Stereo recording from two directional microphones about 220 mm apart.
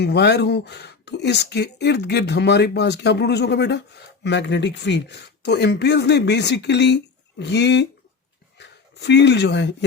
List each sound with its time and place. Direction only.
0.0 s speech: 50° left (ahead or behind)